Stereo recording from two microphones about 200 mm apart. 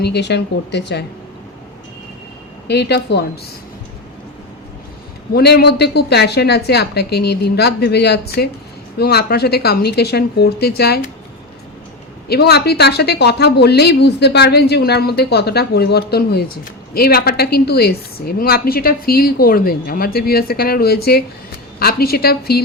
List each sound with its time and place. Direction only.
0.0 s speech: 60° left (ahead or behind)
2.6 s speech: 55° left (ahead or behind)
5.3 s a woman's voice: 55° left (ahead or behind)
12.3 s a woman's voice: 55° left (ahead or behind)